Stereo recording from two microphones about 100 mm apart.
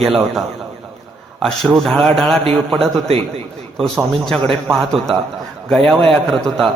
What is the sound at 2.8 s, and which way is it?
Speech, 75° right (ahead or behind).